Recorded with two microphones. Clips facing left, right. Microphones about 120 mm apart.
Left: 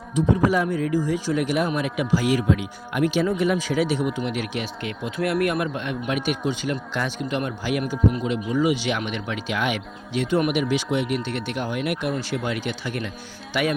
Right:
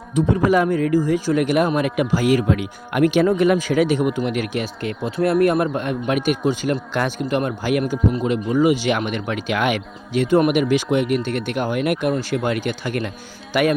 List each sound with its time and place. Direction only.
0.2 s speech: 55° right (ahead or behind)
13.5 s music: 50° right (ahead or behind)